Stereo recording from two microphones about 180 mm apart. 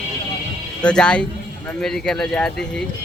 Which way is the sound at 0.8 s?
5° left (ahead or behind).